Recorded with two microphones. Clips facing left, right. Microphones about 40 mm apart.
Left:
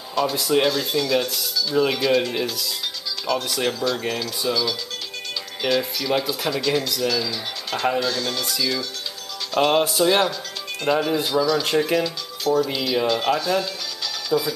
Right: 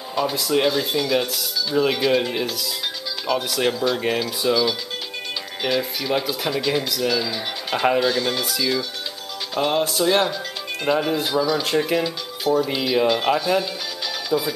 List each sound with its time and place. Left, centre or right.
0.2 s speech: centre
0.7 s speech: centre
3.8 s speech: centre
9.8 s speech: centre
14.3 s speech: centre